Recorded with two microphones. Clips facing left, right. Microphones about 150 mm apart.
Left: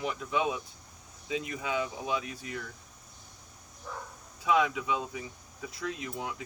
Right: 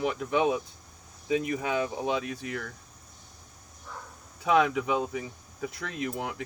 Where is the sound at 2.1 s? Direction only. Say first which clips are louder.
Right 4 dB; 60° right (ahead or behind).